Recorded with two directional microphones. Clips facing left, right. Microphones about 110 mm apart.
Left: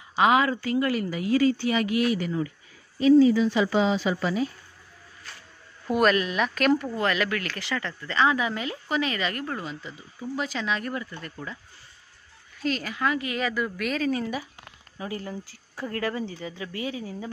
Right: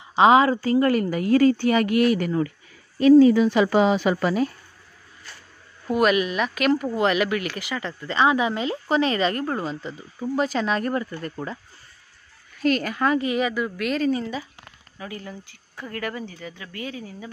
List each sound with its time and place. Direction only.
0.1 s a woman's voice: 30° right (ahead or behind); by 4.5 s 60° right (ahead or behind)
5.9 s speech: 5° right (ahead or behind)
6.9 s speech: 20° right (ahead or behind); by 11.5 s 40° right (ahead or behind)
12.6 s a woman's voice: 55° right (ahead or behind)
13.4 s speech: 10° right (ahead or behind)
13.7 s speech: centre (ahead or behind)
15.0 s speech: 25° left (ahead or behind)